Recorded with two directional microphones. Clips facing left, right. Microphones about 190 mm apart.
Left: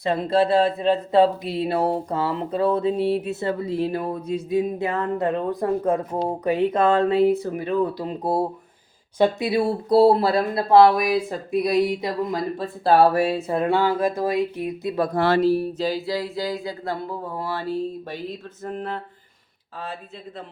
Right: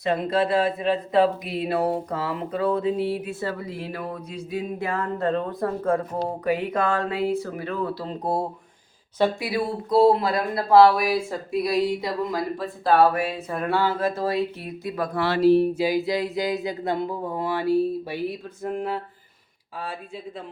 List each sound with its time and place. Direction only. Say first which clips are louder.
0.0 s speech: left 2 dB; 30° left (ahead or behind); by 8.4 s 5° left (ahead or behind)
9.1 s speech: left 3 dB; 20° left (ahead or behind)
9.9 s speech: left 2 dB; 35° left (ahead or behind); by 14.9 s 15° left (ahead or behind)
14.9 s speech: left 4 dB; 30° left (ahead or behind)
15.4 s speech: right 3 dB; 20° right (ahead or behind)